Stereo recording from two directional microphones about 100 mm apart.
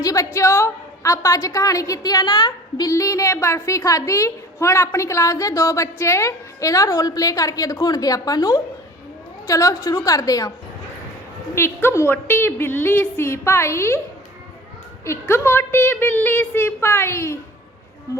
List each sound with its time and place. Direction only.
0.0 s a woman's voice: 35° left (ahead or behind)
2.9 s a woman's voice: 35° left (ahead or behind)
11.5 s a woman's voice: 25° left (ahead or behind)
15.0 s a woman's voice: 25° left (ahead or behind)